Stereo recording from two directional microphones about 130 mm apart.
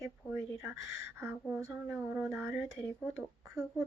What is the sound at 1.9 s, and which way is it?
Speech, 20° right (ahead or behind).